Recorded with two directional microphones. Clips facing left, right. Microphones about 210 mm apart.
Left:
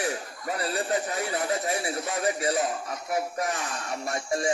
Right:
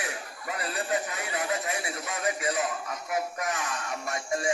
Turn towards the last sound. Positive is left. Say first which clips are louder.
# left 2 dB
turn(degrees=35)  # may be behind; listen again after turning